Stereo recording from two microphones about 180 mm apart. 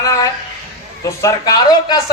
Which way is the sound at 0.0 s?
20° left (ahead or behind).